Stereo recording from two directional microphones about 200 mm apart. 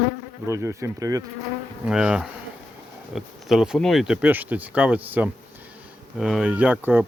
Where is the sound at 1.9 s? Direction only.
5° right (ahead or behind).